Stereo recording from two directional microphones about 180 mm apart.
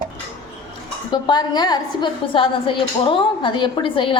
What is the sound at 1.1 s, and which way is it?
A woman's voice, 25° left (ahead or behind).